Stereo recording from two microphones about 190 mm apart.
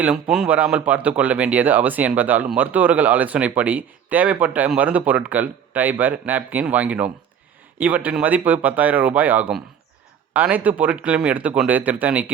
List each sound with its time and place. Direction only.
0.0 s speech: 5° right (ahead or behind)